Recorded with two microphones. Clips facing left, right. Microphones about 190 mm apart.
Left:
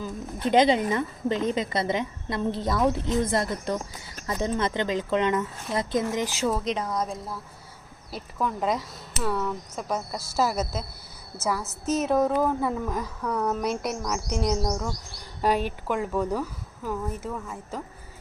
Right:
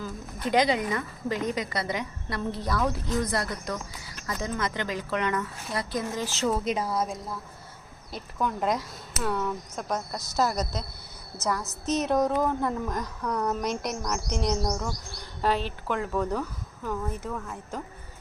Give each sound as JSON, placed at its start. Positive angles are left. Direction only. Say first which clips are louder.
{"t": 0.0, "sound": "a woman's voice", "louder": "left 3 dB", "side_deg": 25}
{"t": 6.5, "sound": "speech", "louder": "even", "side_deg": -5}
{"t": 15.4, "sound": "a woman's voice", "louder": "left 2 dB", "side_deg": 15}